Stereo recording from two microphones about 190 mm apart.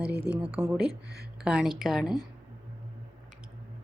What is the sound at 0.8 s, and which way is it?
Speech, 60° right (ahead or behind).